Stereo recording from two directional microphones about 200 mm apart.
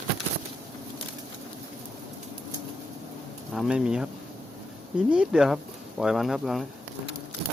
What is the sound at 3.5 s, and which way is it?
Speech, centre (ahead or behind).